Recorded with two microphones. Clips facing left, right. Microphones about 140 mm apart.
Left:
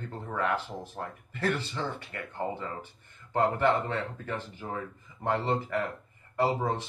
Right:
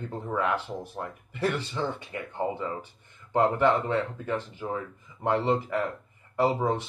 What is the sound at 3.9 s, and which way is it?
Speech, 15° right (ahead or behind).